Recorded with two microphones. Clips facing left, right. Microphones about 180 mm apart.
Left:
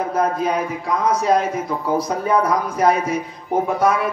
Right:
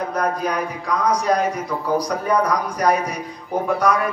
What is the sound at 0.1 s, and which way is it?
A man's voice, 25° left (ahead or behind).